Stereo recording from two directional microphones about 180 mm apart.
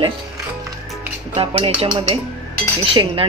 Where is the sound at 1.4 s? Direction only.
30° right (ahead or behind).